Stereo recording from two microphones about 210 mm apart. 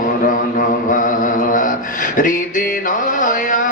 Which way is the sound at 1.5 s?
40° left (ahead or behind).